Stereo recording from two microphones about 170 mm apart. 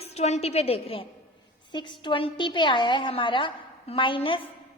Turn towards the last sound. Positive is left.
turn(degrees=30)  # may be behind; listen again after turning